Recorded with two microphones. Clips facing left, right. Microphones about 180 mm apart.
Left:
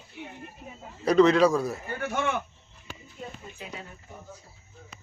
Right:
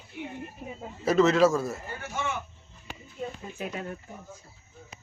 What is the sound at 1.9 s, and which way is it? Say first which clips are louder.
Speech: left 9 dB; 60° left (ahead or behind).